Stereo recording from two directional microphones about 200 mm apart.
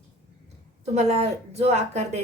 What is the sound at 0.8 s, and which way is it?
A woman's voice, 35° right (ahead or behind).